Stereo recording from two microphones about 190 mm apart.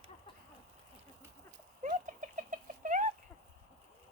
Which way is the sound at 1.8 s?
40° right (ahead or behind).